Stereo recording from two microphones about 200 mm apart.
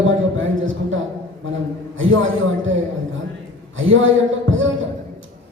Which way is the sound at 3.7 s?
75° right (ahead or behind).